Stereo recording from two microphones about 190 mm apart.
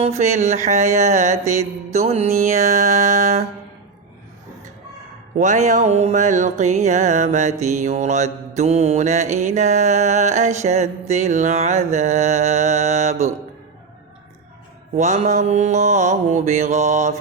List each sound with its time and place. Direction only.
0.3 s mantra: 40° right (ahead or behind)
5.4 s mantra: 40° right (ahead or behind)
14.9 s mantra: 35° right (ahead or behind)